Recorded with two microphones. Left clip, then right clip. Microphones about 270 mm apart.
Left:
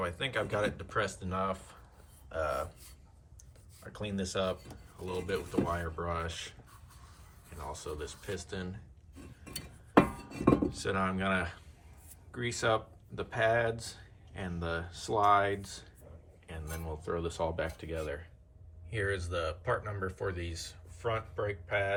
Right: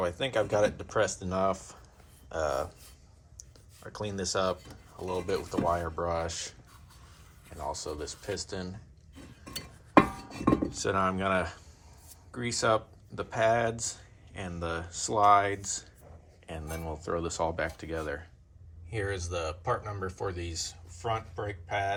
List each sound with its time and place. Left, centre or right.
0.0 s speech: centre
2.3 s a sound: centre
3.9 s speech: centre
7.5 s speech: centre
9.5 s chink: centre
10.7 s speech: centre